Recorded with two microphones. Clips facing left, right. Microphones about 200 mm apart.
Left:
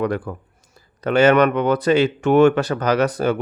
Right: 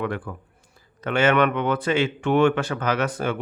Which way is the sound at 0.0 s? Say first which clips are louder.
Left 6 dB; 40° left (ahead or behind).